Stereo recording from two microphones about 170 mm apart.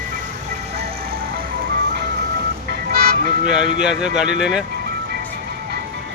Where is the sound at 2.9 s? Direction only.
60° right (ahead or behind).